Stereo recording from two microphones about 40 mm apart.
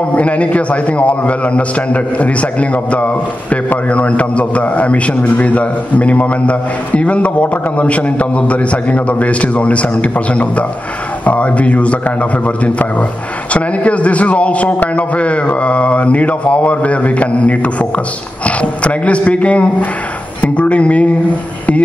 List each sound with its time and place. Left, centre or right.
0.1 s a man's voice: left